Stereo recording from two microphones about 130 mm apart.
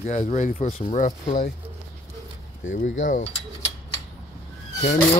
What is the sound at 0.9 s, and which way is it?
Speech, 65° left (ahead or behind).